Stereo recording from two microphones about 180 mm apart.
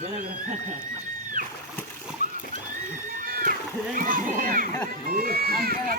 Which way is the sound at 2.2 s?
45° right (ahead or behind).